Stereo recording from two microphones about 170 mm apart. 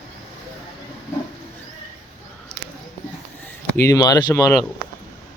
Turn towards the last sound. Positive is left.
turn(degrees=20)  # may be behind; listen again after turning